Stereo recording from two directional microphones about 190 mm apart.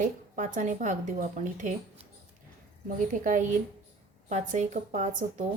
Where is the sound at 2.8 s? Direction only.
45° right (ahead or behind).